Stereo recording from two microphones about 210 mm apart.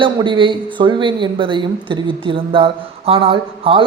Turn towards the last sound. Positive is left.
turn(degrees=-25)  # may be behind; listen again after turning